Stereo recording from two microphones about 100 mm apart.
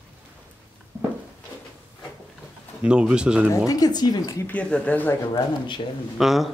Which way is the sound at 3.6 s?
40° left (ahead or behind).